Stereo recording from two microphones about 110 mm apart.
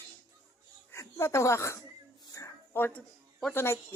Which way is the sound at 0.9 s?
25° left (ahead or behind).